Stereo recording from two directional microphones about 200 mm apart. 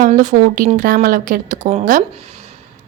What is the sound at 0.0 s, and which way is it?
A woman's voice, 40° right (ahead or behind).